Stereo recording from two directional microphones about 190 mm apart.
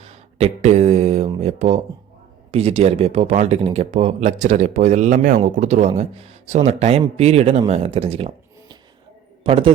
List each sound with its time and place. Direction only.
0.3 s a sound: 35° right (ahead or behind)
1.4 s speech: 35° right (ahead or behind)
9.4 s a man's voice: 30° right (ahead or behind)